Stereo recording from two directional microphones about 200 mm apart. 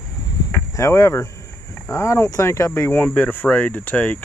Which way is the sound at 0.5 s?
15° left (ahead or behind).